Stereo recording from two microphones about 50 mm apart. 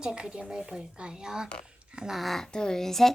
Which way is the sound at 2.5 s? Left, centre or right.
Centre.